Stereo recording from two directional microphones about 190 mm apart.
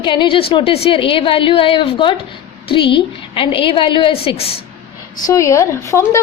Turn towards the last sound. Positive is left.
turn(degrees=15)  # may be behind; listen again after turning